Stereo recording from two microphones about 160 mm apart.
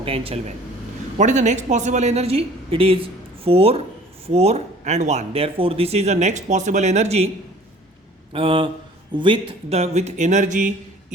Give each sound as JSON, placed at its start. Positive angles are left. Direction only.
{"t": 0.0, "sound": "a woman's voice", "side_deg": -35}
{"t": 1.2, "sound": "a woman's voice", "side_deg": -50}
{"t": 8.3, "sound": "a woman's voice", "side_deg": -35}